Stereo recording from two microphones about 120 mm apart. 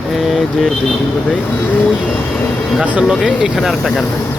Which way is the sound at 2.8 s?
10° right (ahead or behind).